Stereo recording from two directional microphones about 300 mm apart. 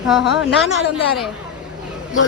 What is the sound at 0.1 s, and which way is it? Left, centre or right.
Speech, centre.